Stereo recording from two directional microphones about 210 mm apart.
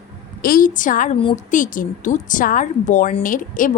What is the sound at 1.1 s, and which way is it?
Speech, 25° left (ahead or behind).